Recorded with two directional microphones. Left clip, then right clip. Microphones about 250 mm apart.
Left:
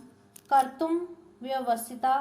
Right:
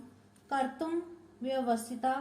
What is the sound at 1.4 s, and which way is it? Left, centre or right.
Speech, left.